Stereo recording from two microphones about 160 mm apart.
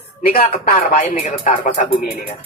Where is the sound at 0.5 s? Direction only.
50° left (ahead or behind).